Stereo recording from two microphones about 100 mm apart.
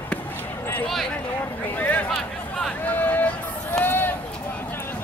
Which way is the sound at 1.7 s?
15° left (ahead or behind).